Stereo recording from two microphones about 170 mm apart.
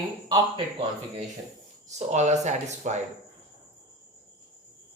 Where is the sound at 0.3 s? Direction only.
30° right (ahead or behind).